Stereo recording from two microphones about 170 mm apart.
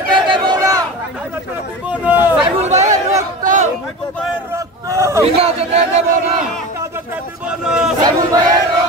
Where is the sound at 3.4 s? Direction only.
45° right (ahead or behind).